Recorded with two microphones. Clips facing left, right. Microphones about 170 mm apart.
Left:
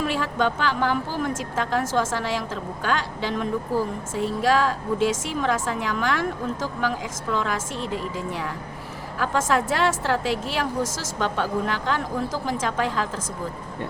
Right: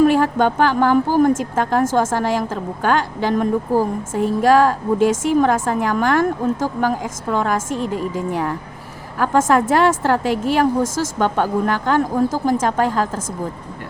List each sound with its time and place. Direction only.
0.0 s speech: 50° right (ahead or behind)